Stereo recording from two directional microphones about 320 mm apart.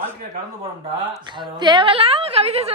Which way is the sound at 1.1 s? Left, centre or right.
Centre.